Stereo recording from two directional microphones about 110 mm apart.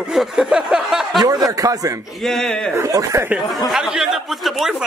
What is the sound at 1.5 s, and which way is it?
Speech, 30° right (ahead or behind).